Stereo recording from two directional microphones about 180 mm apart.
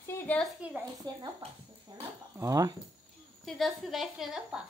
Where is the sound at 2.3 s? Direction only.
20° right (ahead or behind).